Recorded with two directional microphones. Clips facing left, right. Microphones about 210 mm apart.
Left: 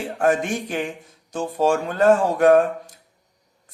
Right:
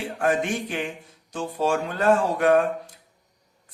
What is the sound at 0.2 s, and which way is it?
Speech, 45° left (ahead or behind).